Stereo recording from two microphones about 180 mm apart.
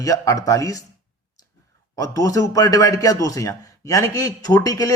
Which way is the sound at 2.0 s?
20° left (ahead or behind).